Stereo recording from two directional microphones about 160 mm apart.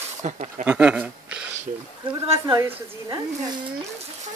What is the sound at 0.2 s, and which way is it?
Speech, 50° right (ahead or behind).